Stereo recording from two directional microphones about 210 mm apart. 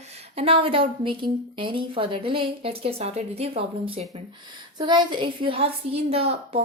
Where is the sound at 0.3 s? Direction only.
25° right (ahead or behind).